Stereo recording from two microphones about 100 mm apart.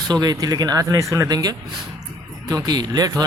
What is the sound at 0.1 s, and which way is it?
Speech, 45° right (ahead or behind).